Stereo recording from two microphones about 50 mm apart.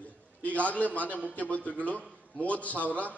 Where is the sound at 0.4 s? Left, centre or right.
Left.